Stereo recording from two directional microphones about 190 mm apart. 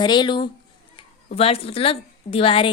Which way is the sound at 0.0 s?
25° left (ahead or behind).